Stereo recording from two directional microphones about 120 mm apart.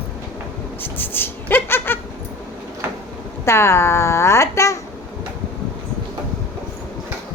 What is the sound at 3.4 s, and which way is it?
Speech, 20° left (ahead or behind).